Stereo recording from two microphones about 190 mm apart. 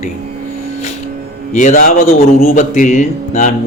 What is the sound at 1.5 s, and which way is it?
Speech, 40° left (ahead or behind).